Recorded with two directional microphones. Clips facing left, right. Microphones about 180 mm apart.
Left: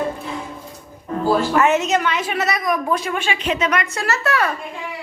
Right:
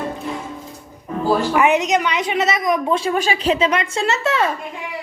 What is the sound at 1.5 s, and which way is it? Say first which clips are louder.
A woman's voice: right 1 dB; 15° right (ahead or behind).